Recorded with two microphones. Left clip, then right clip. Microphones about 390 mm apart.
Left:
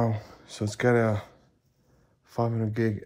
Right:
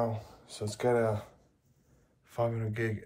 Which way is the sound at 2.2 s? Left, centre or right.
Centre.